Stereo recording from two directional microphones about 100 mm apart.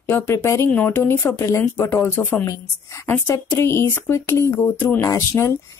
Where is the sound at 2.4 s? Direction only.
30° left (ahead or behind).